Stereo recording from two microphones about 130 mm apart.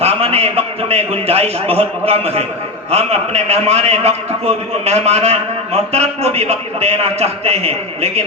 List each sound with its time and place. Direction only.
0.0 s a man's voice: 50° right (ahead or behind)